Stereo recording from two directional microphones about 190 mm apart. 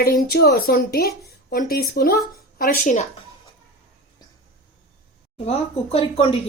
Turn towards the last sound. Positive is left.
turn(degrees=30)  # may be behind; listen again after turning